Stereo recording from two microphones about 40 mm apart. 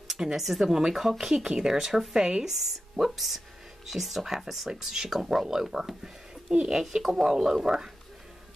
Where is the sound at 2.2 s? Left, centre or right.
Centre.